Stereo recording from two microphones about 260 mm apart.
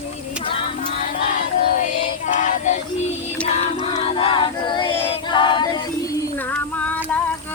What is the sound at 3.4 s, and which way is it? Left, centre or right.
Choir, left.